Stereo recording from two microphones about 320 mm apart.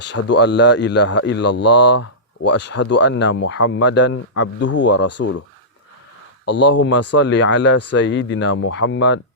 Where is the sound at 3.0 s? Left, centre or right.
Left.